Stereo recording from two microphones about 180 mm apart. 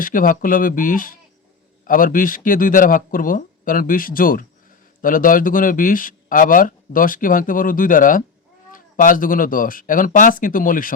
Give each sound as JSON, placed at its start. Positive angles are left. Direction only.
{"t": 0.0, "sound": "a man's voice", "side_deg": 50}